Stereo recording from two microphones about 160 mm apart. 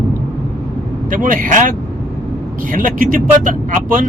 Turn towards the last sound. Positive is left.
turn(degrees=-55)  # may be behind; listen again after turning